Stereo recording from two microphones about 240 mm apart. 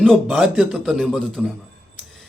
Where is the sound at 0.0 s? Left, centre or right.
Centre.